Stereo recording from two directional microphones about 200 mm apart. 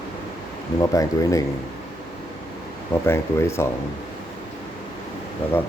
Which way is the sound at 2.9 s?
10° left (ahead or behind).